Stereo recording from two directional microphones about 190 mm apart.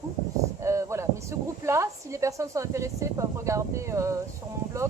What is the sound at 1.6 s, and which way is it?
Speech, 15° right (ahead or behind).